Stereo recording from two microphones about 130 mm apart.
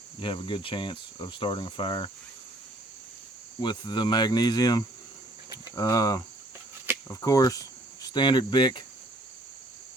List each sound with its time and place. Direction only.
0.2 s speech: 40° left (ahead or behind)
3.6 s speech: 35° left (ahead or behind)